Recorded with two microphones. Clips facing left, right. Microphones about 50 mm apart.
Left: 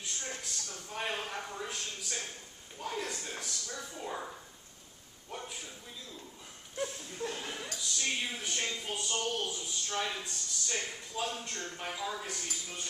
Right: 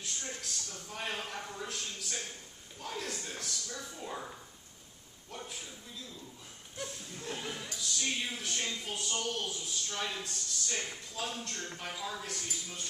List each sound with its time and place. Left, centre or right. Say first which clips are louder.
0.0 s a sound: left 1 dB; centre
2.8 s speech: left 2 dB; centre
6.8 s speech: left 6 dB; centre
7.3 s speech: even; centre